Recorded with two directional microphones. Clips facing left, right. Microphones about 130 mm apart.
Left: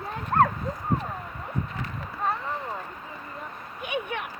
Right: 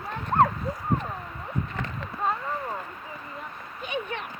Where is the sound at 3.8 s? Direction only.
15° left (ahead or behind).